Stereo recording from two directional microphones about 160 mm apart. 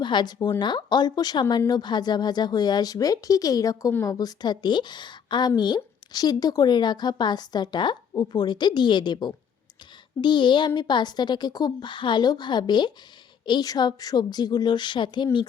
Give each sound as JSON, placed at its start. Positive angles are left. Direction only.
{"t": 0.0, "sound": "a woman's voice", "side_deg": 30}